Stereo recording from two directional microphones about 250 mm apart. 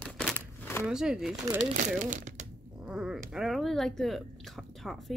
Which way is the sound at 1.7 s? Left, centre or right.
Right.